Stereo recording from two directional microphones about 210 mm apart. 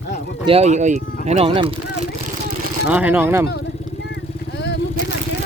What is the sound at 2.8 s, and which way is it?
Speech, 5° right (ahead or behind).